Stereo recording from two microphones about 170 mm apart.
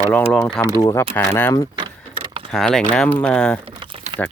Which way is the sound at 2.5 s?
5° left (ahead or behind).